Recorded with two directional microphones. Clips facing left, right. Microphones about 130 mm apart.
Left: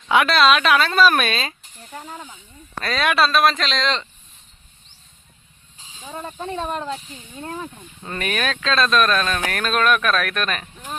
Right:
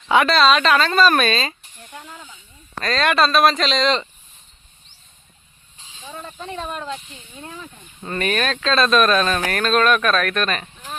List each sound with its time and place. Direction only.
0.1 s speech: centre (ahead or behind)
1.9 s speech: 40° left (ahead or behind)
2.8 s speech: 5° left (ahead or behind)
5.9 s a sound: 15° left (ahead or behind)
6.7 s speech: 35° left (ahead or behind)
8.0 s speech: centre (ahead or behind)